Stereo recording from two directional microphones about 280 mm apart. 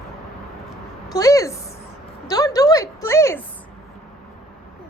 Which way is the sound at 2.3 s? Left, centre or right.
Centre.